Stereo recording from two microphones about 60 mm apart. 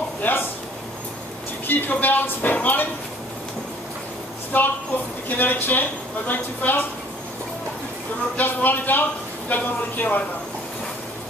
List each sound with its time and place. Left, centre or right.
0.2 s a sound: left
1.7 s a woman's voice: left
4.5 s a woman's voice: left
8.4 s a woman's voice: left